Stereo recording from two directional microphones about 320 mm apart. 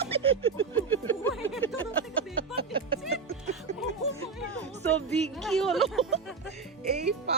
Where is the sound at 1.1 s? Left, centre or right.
Centre.